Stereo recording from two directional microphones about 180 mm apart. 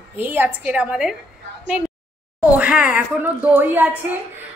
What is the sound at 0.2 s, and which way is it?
Speech, 10° right (ahead or behind).